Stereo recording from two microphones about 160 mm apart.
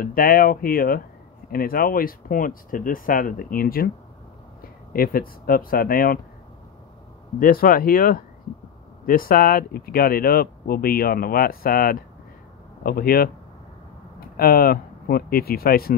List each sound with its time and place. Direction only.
0.0 s speech: 65° left (ahead or behind)
4.9 s speech: 65° left (ahead or behind)
7.3 s speech: 65° left (ahead or behind)
14.3 s speech: 70° left (ahead or behind)